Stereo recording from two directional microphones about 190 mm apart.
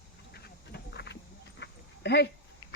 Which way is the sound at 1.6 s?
60° left (ahead or behind).